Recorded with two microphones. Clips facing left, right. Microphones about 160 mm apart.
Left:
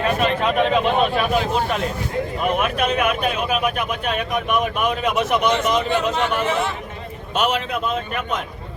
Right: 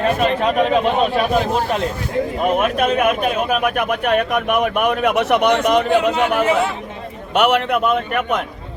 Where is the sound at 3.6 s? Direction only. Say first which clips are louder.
Right 4 dB; 60° right (ahead or behind).